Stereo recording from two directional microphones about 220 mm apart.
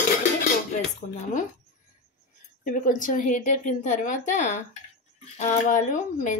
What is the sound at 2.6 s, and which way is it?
Speech, 40° left (ahead or behind).